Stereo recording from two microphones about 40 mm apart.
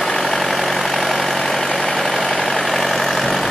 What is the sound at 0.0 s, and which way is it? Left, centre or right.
Vehicle, centre.